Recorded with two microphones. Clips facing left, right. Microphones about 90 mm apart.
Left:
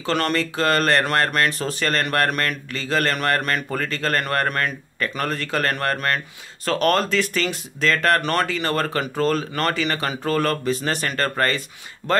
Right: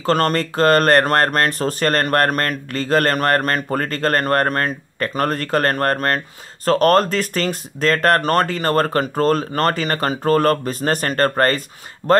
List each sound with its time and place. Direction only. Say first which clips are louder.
0.0 s speech: right 4 dB; 40° right (ahead or behind)